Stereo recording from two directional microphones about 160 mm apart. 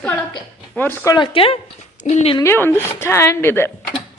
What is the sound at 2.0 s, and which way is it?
Speech, 45° left (ahead or behind).